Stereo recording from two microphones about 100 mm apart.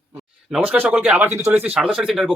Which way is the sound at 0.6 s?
15° right (ahead or behind).